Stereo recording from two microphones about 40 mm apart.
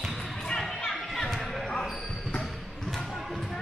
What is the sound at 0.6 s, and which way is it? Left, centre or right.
Basketball bounce, centre.